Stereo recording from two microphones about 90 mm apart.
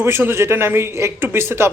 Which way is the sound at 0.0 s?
25° right (ahead or behind).